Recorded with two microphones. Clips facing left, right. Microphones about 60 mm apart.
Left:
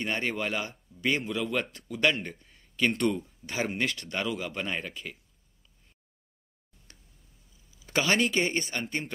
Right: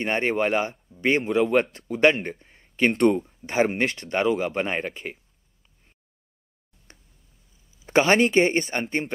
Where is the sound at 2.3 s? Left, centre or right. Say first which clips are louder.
Right 5 dB; right.